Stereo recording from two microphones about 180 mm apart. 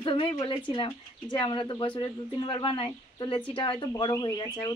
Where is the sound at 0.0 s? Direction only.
30° left (ahead or behind).